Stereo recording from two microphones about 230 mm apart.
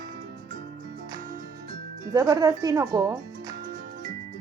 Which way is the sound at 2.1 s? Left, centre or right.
Centre.